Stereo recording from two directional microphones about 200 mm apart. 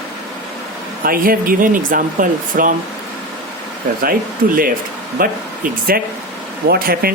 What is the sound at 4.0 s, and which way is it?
Speech, 45° right (ahead or behind).